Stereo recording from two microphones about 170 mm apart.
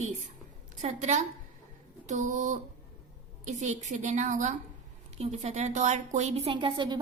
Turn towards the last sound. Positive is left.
turn(degrees=-25)  # may be behind; listen again after turning